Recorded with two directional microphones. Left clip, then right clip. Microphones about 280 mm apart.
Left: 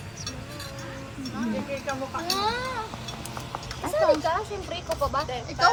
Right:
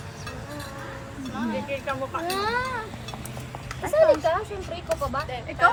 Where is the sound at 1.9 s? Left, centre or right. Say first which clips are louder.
Even; right.